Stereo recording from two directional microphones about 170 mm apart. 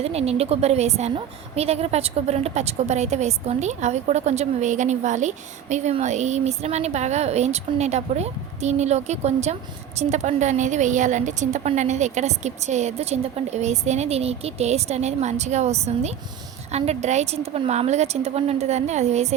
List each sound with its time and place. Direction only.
0.0 s a woman's voice: 40° right (ahead or behind)